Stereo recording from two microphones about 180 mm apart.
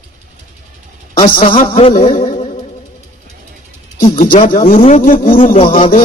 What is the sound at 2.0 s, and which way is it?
Speech, 45° left (ahead or behind).